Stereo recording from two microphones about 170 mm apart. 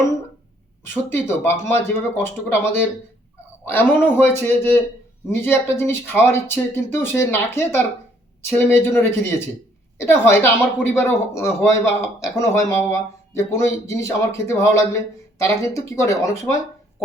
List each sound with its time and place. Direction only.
1.1 s speech: 15° left (ahead or behind)